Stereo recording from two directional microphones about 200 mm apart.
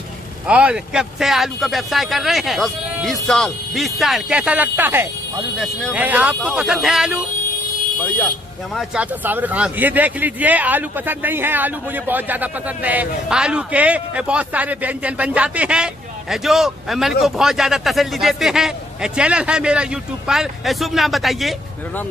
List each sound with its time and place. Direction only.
0.5 s speech: 5° right (ahead or behind)
5.6 s speech: 5° left (ahead or behind)
5.9 s speech: 5° right (ahead or behind)
8.7 s a man's voice: 5° right (ahead or behind)